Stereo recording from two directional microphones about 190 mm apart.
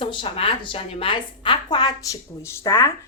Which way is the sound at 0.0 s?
25° left (ahead or behind).